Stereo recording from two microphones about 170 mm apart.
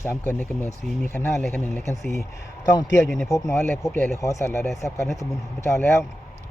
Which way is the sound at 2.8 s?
20° left (ahead or behind).